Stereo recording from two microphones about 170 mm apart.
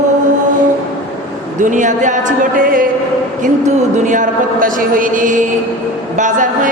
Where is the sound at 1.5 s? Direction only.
50° right (ahead or behind).